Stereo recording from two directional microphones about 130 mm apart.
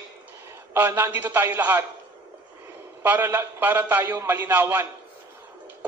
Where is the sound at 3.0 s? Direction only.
15° right (ahead or behind).